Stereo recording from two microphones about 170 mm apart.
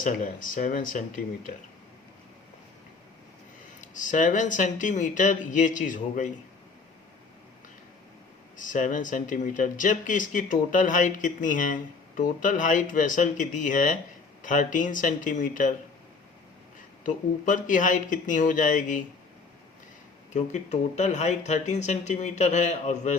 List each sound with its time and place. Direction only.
0.0 s speech: 50° left (ahead or behind)
3.8 s speech: 50° left (ahead or behind)
8.5 s speech: 50° left (ahead or behind)
17.0 s speech: 50° left (ahead or behind)
20.3 s speech: 45° left (ahead or behind)